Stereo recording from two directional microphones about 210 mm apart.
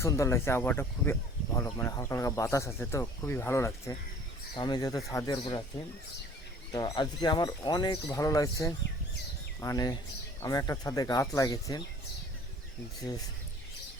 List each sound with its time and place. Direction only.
0.0 s speech: 15° left (ahead or behind)
6.7 s speech: 20° left (ahead or behind)